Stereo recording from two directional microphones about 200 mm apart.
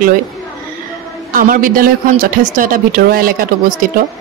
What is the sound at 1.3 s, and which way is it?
A woman's voice, 45° right (ahead or behind).